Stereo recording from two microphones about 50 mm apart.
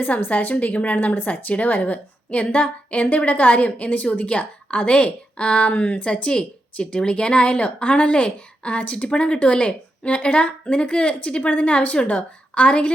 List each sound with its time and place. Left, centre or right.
0.3 s a woman's voice: left